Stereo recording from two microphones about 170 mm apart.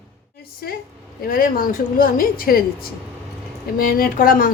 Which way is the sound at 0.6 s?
65° left (ahead or behind).